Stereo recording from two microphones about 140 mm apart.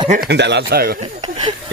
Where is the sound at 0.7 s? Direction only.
90° right.